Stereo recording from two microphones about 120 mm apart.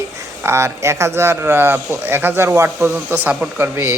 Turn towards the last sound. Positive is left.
turn(degrees=-20)  # may be behind; listen again after turning